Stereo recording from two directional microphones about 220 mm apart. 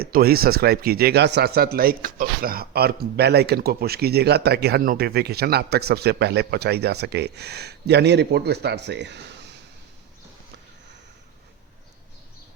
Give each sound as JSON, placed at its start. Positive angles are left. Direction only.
{"t": 0.0, "sound": "a man's voice", "side_deg": -45}